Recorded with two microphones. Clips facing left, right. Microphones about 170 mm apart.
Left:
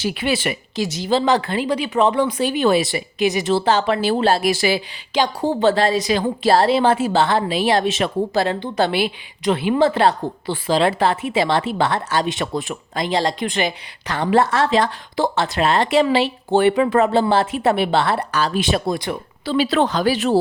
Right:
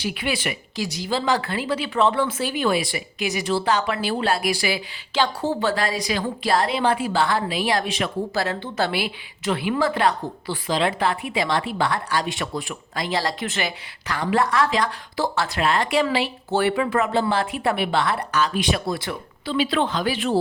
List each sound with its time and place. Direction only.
0.0 s a woman's voice: 30° left (ahead or behind)
5.1 s a woman's voice: 15° left (ahead or behind); by 18.8 s 35° left (ahead or behind)
18.9 s speech: 20° left (ahead or behind)
19.5 s speech: 40° left (ahead or behind)